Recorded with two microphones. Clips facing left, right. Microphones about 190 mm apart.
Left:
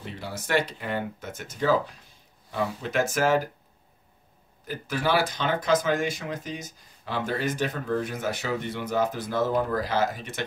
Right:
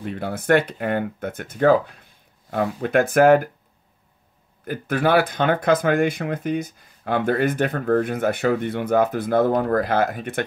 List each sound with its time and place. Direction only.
0.0 s speech: 55° right (ahead or behind)
4.6 s speech: 55° right (ahead or behind)